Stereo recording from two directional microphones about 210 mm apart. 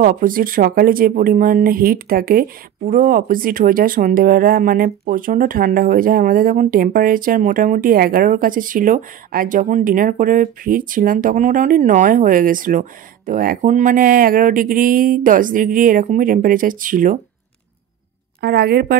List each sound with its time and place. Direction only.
0.0 s speech: 40° right (ahead or behind)
18.4 s a woman's voice: 50° right (ahead or behind)